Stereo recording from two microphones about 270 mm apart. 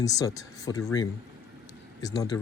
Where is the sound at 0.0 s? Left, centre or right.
Centre.